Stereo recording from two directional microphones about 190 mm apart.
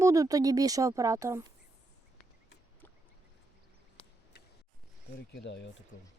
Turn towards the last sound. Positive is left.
turn(degrees=65)  # may be behind; listen again after turning